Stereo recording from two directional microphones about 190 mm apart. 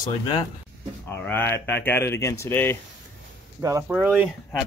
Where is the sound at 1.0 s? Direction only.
10° left (ahead or behind).